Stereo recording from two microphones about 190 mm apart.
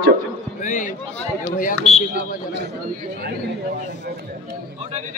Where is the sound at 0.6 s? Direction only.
40° left (ahead or behind).